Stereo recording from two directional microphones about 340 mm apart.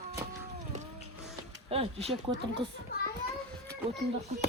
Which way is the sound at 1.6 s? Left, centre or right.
Centre.